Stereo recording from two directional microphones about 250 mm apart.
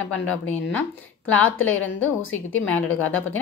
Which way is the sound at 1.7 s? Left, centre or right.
Left.